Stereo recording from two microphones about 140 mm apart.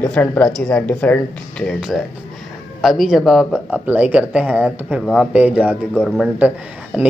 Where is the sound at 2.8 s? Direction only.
Centre (ahead or behind).